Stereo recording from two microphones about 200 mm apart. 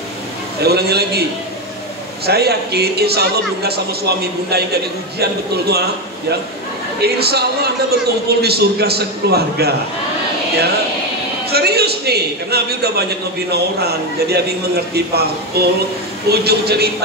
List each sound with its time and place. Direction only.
0.6 s a man's voice: 55° right (ahead or behind)
2.2 s a man's voice: 55° right (ahead or behind)
5.2 s a man's voice: 55° right (ahead or behind)
7.0 s a man's voice: 55° right (ahead or behind)
11.5 s a man's voice: 55° right (ahead or behind)